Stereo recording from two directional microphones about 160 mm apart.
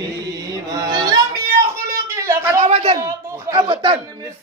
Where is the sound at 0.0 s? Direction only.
25° right (ahead or behind).